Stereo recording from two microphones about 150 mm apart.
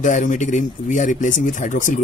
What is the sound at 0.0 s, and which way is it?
Speech, 55° left (ahead or behind).